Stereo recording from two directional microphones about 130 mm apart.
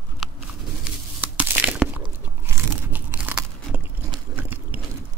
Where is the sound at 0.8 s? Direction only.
10° right (ahead or behind).